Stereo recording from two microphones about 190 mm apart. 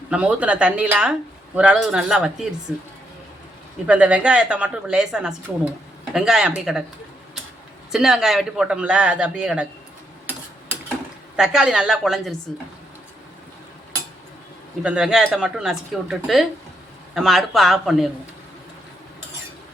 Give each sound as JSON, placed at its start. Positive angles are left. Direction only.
{"t": 0.1, "sound": "a man's voice", "side_deg": -5}
{"t": 3.8, "sound": "a man's voice", "side_deg": -5}
{"t": 7.9, "sound": "a man's voice", "side_deg": 0}
{"t": 11.3, "sound": "a man's voice", "side_deg": -5}
{"t": 14.8, "sound": "a man's voice", "side_deg": -5}